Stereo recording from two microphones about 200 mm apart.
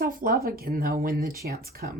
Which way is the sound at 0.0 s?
45° right (ahead or behind).